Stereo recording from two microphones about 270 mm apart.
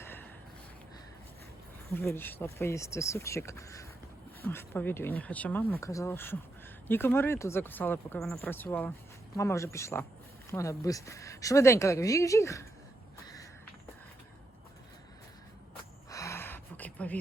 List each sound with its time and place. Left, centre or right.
0.0 s a sound: centre
1.9 s speech: centre
16.0 s gasp: centre